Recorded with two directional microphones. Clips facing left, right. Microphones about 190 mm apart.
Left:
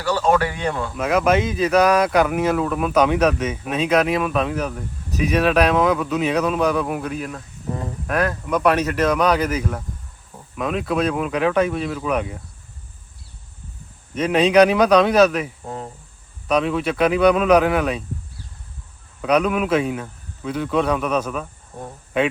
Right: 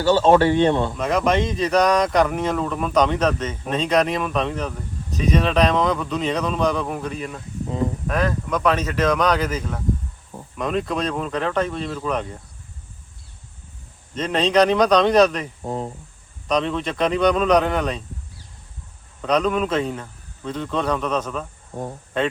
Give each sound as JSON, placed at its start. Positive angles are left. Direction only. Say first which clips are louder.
{"t": 0.0, "sound": "speech", "louder": "right 4 dB", "side_deg": -25}
{"t": 0.9, "sound": "speech", "louder": "left 2 dB", "side_deg": 5}
{"t": 14.1, "sound": "speech", "louder": "left 4 dB", "side_deg": 10}
{"t": 16.5, "sound": "speech", "louder": "left 2 dB", "side_deg": 5}
{"t": 19.2, "sound": "speech", "louder": "left 1 dB", "side_deg": 10}